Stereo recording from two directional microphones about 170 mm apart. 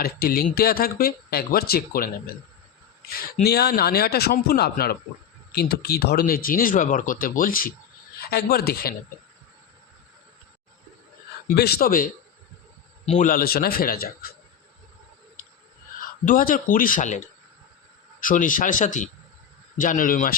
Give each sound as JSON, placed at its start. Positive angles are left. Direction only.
{"t": 0.0, "sound": "speech", "side_deg": 60}
{"t": 3.4, "sound": "speech", "side_deg": 70}
{"t": 11.4, "sound": "speech", "side_deg": 65}
{"t": 13.1, "sound": "speech", "side_deg": 50}
{"t": 16.0, "sound": "speech", "side_deg": 55}